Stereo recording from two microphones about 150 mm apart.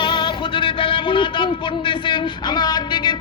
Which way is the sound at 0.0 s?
30° left (ahead or behind).